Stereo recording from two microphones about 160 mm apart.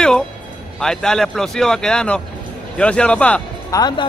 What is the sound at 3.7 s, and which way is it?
Speech, 25° left (ahead or behind).